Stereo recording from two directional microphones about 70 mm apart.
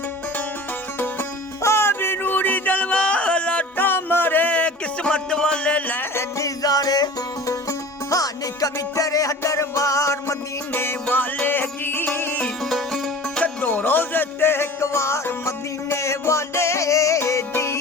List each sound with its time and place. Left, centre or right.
1.6 s music: left
6.1 s music: left
7.4 s music: left
11.4 s music: left
12.6 s music: centre
13.4 s music: left